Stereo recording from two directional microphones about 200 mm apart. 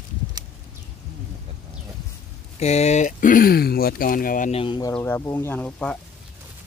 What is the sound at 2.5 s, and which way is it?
Speech, 35° left (ahead or behind).